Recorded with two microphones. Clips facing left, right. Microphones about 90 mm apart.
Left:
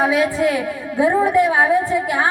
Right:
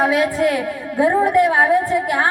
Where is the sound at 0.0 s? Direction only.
55° right (ahead or behind).